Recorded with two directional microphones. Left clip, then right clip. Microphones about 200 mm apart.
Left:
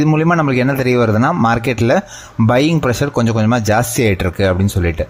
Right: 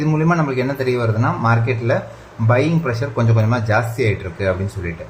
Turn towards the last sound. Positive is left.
turn(degrees=55)  # may be behind; listen again after turning